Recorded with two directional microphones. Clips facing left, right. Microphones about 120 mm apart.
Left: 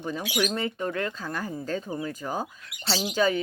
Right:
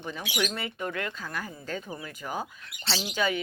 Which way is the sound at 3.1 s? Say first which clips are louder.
Left 4 dB; 35° left (ahead or behind).